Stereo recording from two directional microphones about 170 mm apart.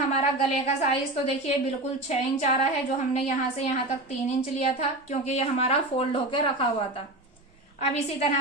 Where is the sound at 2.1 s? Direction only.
40° left (ahead or behind).